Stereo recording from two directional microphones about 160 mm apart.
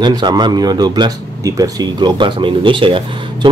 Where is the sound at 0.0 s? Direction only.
25° right (ahead or behind).